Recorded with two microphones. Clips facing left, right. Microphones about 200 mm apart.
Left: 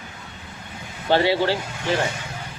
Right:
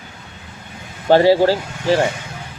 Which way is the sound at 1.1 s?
40° right (ahead or behind).